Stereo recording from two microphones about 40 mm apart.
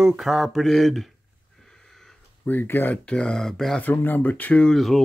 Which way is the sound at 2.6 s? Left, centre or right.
Left.